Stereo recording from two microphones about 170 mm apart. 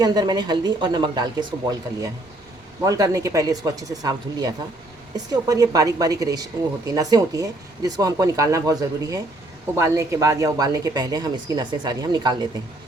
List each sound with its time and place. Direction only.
0.0 s a woman's voice: 25° right (ahead or behind)
2.8 s a woman's voice: 20° right (ahead or behind)